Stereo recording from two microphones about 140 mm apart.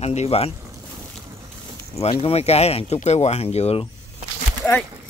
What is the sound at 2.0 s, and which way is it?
Speech, 45° left (ahead or behind).